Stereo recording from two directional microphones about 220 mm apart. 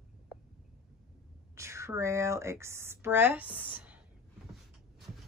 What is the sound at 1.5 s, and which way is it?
Speech, 15° right (ahead or behind).